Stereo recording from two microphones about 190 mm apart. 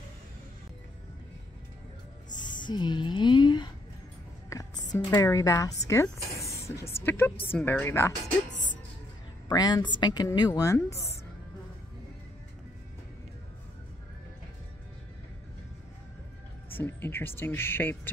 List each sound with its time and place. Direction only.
2.4 s a sound: 25° left (ahead or behind)
4.5 s speech: 15° left (ahead or behind)
9.5 s speech: 20° left (ahead or behind)
16.7 s speech: 10° left (ahead or behind)